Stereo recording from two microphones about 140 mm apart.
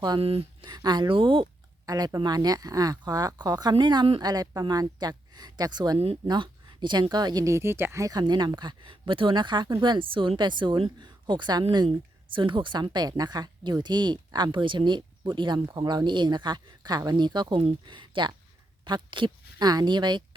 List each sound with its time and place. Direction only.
0.2 s a woman's voice: 40° right (ahead or behind)